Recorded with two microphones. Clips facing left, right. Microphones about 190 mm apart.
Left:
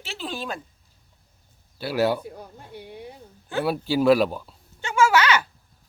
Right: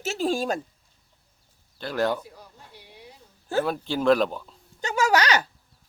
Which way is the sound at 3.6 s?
10° left (ahead or behind).